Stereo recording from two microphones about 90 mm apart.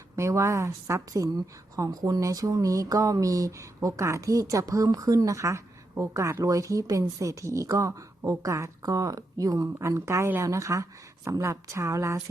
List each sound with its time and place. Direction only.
0.2 s a woman's voice: 35° right (ahead or behind)